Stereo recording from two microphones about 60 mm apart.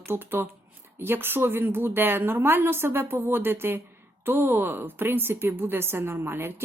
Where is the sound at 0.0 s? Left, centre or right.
Right.